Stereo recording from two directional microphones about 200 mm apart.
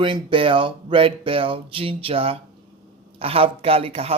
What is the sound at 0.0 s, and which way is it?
A woman's voice, 25° right (ahead or behind).